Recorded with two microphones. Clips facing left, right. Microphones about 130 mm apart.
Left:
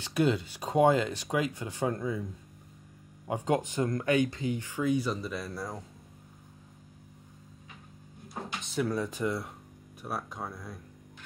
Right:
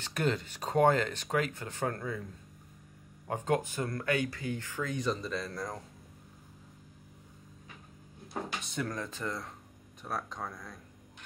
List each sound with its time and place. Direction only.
0.0 s speech: 10° left (ahead or behind)
3.3 s speech: 15° left (ahead or behind)
8.7 s speech: 10° left (ahead or behind)